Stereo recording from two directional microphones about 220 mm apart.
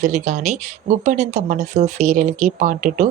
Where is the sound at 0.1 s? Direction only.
30° right (ahead or behind).